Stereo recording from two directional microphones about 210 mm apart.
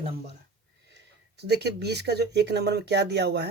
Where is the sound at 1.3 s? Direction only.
50° right (ahead or behind).